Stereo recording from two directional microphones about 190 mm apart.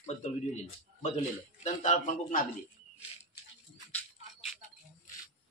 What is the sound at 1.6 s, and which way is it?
Speech, 40° left (ahead or behind).